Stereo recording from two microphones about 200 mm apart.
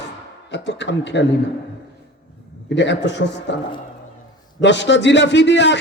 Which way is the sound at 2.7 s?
60° left (ahead or behind).